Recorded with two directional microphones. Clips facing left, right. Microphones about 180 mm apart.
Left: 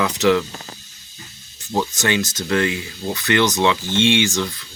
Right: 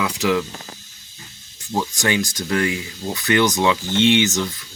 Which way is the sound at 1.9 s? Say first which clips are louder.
Even; 15° right (ahead or behind).